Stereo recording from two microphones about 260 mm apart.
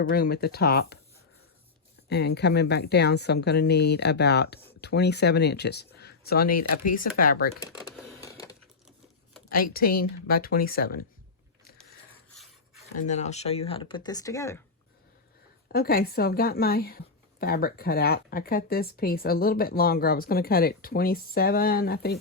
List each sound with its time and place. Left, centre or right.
0.0 s speech: left
2.0 s speech: left
7.6 s speech: centre
8.2 s a sound: centre
9.5 s speech: left
13.0 s speech: left; by 14.6 s centre
15.7 s speech: left